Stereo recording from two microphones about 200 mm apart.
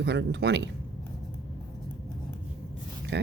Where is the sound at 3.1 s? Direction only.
60° right (ahead or behind).